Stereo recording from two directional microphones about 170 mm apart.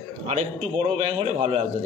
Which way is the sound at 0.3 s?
40° right (ahead or behind).